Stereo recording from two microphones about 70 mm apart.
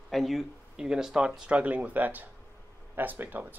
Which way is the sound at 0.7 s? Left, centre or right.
Centre.